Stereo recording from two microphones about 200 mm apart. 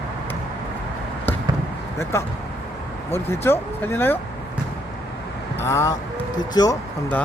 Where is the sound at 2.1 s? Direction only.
15° left (ahead or behind).